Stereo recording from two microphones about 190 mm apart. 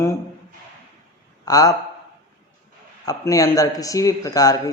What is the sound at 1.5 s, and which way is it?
Speech, 20° left (ahead or behind).